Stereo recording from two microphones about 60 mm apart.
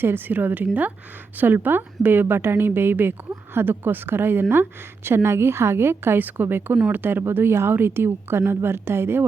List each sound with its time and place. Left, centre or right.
0.0 s a woman's voice: right